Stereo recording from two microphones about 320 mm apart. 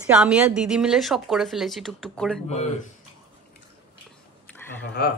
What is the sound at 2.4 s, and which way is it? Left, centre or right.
Speech, left.